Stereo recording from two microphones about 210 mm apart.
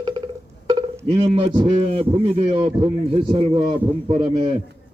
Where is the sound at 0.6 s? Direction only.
25° right (ahead or behind).